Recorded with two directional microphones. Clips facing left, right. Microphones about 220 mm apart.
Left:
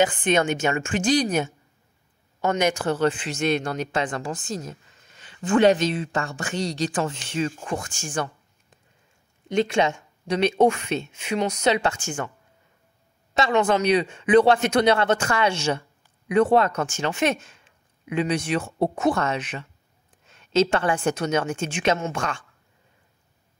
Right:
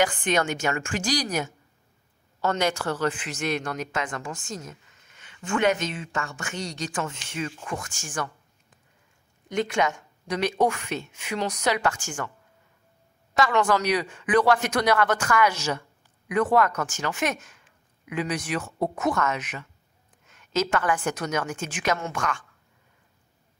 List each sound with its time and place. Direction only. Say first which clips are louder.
0.0 s speech: left 3 dB; 20° left (ahead or behind)
9.5 s speech: left 4 dB; 25° left (ahead or behind)
13.3 s speech: left 2 dB; 25° left (ahead or behind)